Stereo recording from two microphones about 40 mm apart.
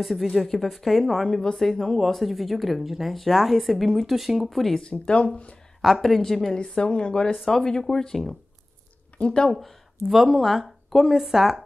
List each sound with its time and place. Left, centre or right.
0.0 s speech: centre
1.4 s speech: centre
1.8 s speech: centre
4.7 s speech: left
5.8 s speech: centre
6.6 s speech: left
7.4 s speech: centre
9.2 s speech: left
9.5 s speech: centre